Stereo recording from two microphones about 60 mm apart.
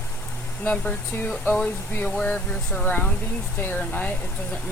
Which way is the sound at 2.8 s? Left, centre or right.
Left.